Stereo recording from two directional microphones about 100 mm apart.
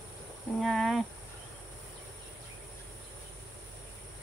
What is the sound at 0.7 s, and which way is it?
Insect, centre (ahead or behind).